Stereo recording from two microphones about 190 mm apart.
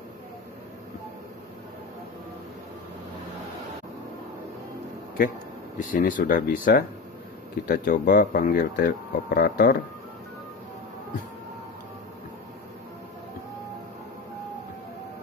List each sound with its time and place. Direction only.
5.8 s speech: 45° left (ahead or behind)